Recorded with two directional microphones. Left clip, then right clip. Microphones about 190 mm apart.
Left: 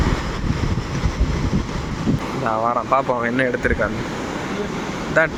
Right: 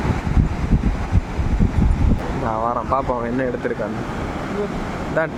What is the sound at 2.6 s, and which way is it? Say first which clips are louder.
Speech: left 2 dB; 5° right (ahead or behind).